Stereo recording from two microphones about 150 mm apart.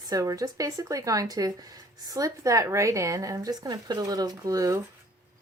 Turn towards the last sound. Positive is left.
turn(degrees=-25)  # may be behind; listen again after turning